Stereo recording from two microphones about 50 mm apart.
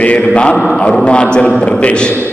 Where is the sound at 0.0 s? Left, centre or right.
Left.